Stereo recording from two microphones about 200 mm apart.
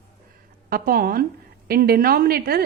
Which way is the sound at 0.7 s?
45° right (ahead or behind).